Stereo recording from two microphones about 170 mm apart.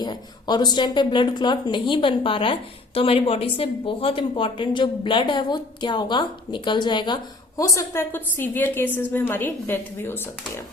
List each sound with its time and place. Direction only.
0.0 s a woman's voice: 25° left (ahead or behind)